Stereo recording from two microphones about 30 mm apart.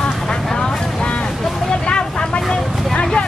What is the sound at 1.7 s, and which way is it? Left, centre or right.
Vehicle, left.